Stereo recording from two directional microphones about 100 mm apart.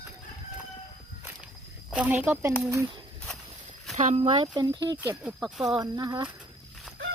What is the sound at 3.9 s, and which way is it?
Speech, 90° right.